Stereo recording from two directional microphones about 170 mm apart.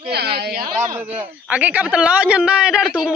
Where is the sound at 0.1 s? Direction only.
70° right (ahead or behind).